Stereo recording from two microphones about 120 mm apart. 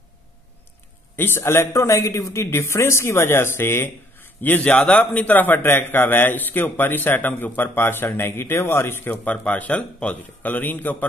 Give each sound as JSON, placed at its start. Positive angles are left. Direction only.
{"t": 1.1, "sound": "a man's voice", "side_deg": 20}